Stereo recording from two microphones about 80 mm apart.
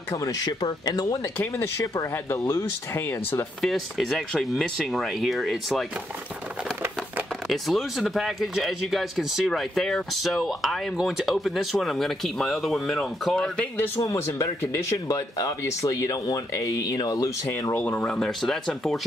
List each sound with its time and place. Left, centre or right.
0.1 s speech: left
1.4 s speech: left
3.6 s speech: centre
7.4 s speech: centre
14.0 s speech: left
15.0 s speech: left
17.5 s speech: left
17.7 s speech: centre